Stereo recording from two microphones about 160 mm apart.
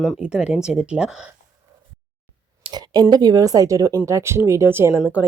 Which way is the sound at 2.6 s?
25° right (ahead or behind).